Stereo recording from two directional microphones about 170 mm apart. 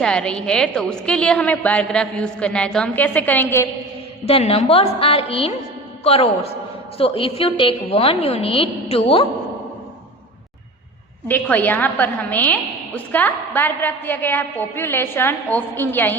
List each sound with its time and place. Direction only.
0.0 s a woman's voice: 5° left (ahead or behind)
4.3 s a woman's voice: 35° left (ahead or behind)
11.3 s a woman's voice: 10° left (ahead or behind)